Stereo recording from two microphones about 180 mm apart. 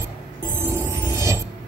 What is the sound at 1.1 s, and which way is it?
Mechanisms, 15° right (ahead or behind).